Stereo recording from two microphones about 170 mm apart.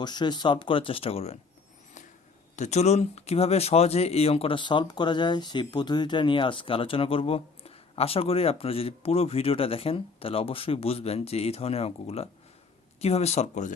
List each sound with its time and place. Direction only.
0.0 s speech: 25° left (ahead or behind)
2.6 s speech: 40° left (ahead or behind)